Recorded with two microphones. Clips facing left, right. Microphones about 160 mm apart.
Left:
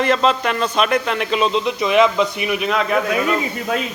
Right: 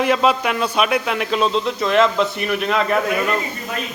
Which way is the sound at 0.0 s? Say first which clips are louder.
Even; 10° right (ahead or behind).